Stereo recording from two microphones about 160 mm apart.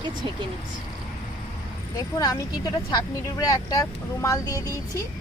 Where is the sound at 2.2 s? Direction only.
25° left (ahead or behind).